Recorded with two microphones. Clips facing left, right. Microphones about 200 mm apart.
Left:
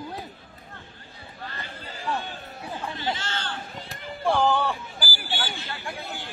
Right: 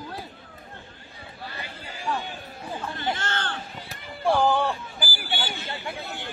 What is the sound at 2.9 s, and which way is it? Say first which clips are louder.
Chatter: right 2 dB; 55° right (ahead or behind).